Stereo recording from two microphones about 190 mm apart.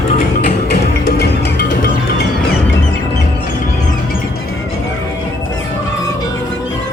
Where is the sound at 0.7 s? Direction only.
60° left (ahead or behind).